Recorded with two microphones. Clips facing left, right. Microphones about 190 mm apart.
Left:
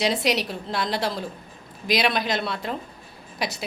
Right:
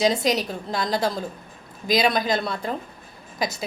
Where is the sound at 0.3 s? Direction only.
5° left (ahead or behind).